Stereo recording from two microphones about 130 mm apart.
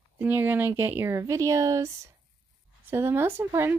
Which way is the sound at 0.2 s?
15° right (ahead or behind).